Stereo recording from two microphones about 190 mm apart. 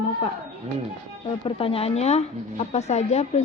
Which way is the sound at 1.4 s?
30° left (ahead or behind).